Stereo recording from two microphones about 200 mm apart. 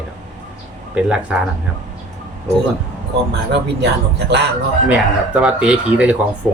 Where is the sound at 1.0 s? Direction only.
5° right (ahead or behind).